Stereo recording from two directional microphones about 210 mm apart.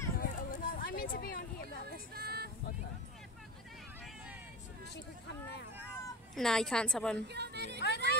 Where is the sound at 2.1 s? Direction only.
45° right (ahead or behind).